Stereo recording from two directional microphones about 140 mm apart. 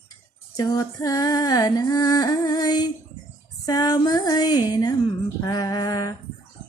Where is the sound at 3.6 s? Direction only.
30° left (ahead or behind).